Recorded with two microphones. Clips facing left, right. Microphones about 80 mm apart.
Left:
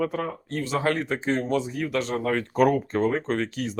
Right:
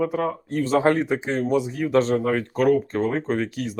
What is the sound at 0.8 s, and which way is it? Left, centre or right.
Speech, centre.